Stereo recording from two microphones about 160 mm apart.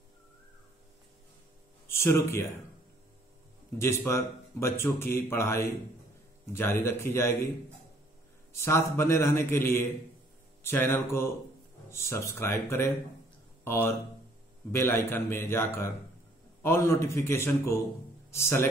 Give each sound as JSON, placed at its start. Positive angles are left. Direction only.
{"t": 1.9, "sound": "speech", "side_deg": 15}
{"t": 3.7, "sound": "a man's voice", "side_deg": 15}
{"t": 8.5, "sound": "a man's voice", "side_deg": 15}